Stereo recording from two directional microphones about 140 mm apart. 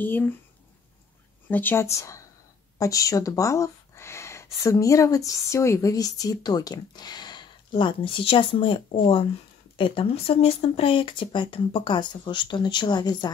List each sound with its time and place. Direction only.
0.0 s speech: 15° left (ahead or behind)
1.5 s speech: 15° left (ahead or behind); by 13.3 s 30° left (ahead or behind)